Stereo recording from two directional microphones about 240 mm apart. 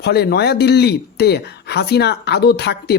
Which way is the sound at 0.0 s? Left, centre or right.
Left.